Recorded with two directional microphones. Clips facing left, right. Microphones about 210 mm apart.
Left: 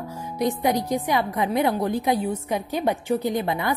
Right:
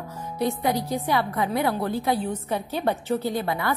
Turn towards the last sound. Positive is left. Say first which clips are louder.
# left 2 dB
turn(degrees=20)  # may be behind; listen again after turning